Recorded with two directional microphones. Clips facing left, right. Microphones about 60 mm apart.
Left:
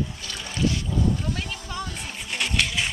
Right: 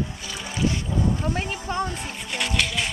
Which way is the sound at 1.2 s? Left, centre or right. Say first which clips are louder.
Right 4 dB; right.